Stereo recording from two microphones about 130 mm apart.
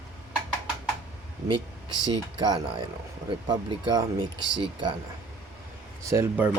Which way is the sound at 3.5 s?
30° right (ahead or behind).